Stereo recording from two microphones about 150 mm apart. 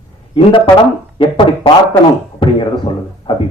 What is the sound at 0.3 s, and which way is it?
A man's voice, 35° left (ahead or behind).